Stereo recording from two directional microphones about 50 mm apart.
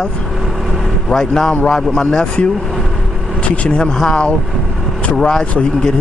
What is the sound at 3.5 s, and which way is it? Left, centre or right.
Speech, left.